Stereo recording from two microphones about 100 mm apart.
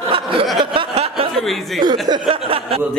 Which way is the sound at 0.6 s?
75° right (ahead or behind).